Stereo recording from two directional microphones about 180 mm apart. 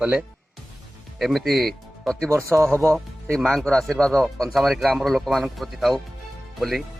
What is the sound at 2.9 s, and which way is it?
Speech, 5° left (ahead or behind).